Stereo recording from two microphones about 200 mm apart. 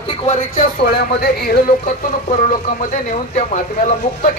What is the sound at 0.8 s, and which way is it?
Speech, 50° left (ahead or behind).